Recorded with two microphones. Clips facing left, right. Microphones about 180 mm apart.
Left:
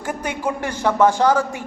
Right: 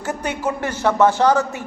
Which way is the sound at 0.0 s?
10° left (ahead or behind).